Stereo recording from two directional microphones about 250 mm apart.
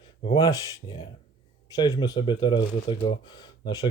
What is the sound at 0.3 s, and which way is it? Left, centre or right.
Speech, centre.